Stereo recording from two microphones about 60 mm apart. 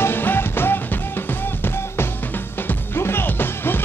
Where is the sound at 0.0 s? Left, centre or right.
Left.